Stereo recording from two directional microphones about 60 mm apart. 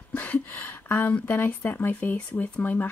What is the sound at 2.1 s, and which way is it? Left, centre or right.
Speech, left.